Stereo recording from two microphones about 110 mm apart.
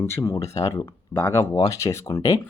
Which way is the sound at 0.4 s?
70° left (ahead or behind).